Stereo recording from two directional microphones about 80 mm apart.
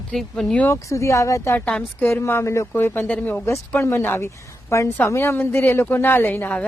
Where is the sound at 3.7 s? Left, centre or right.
Left.